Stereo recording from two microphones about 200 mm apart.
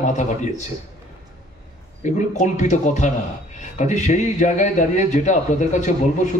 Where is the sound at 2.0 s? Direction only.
35° left (ahead or behind).